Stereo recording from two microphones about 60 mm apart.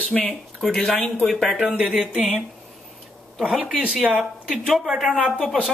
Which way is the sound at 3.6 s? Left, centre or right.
Centre.